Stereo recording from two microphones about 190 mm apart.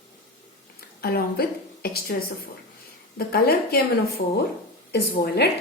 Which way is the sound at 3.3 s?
55° left (ahead or behind).